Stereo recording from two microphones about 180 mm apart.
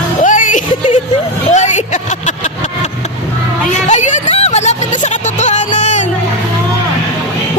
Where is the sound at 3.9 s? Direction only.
40° left (ahead or behind).